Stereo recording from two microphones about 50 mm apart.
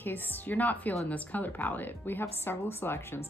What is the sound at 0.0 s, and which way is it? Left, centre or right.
A woman's voice, left.